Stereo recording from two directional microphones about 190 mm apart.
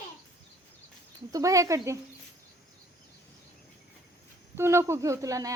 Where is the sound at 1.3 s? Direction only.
15° right (ahead or behind).